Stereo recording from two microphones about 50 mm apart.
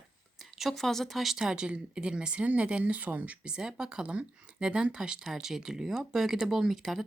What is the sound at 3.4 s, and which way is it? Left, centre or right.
Speech, centre.